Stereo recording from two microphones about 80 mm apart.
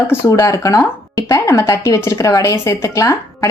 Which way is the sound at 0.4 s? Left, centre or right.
Left.